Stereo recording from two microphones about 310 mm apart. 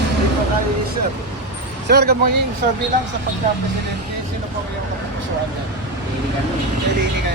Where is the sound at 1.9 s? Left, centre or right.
Right.